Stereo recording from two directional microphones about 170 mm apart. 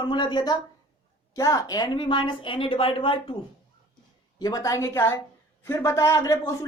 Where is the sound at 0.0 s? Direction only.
25° left (ahead or behind).